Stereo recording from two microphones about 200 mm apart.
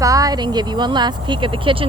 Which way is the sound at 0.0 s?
15° right (ahead or behind).